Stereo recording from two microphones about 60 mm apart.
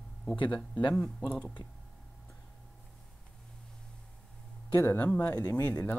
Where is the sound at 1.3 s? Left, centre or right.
Centre.